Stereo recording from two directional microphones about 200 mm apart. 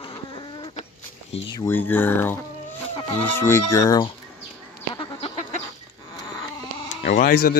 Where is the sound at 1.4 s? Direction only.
15° left (ahead or behind).